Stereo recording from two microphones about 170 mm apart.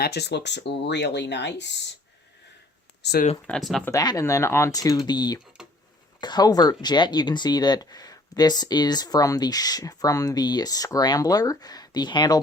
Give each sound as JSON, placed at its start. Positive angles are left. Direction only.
{"t": 0.0, "sound": "speech", "side_deg": 75}
{"t": 3.0, "sound": "speech", "side_deg": 70}
{"t": 3.4, "sound": "speech", "side_deg": 5}
{"t": 3.8, "sound": "speech", "side_deg": 20}
{"t": 5.6, "sound": "a sound", "side_deg": -5}
{"t": 6.1, "sound": "speech", "side_deg": 25}